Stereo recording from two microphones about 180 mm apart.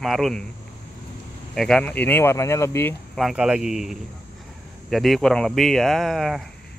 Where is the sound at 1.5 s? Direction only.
Centre (ahead or behind).